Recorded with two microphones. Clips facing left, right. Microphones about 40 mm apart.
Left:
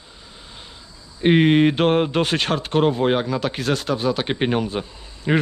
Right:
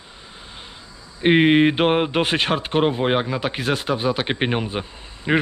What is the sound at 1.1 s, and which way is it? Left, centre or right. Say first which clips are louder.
Speech: even; centre.